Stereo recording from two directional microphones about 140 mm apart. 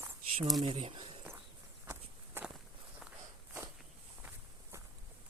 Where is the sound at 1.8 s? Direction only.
15° right (ahead or behind).